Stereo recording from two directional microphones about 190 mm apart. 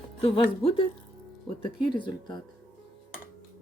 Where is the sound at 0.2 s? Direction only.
30° left (ahead or behind).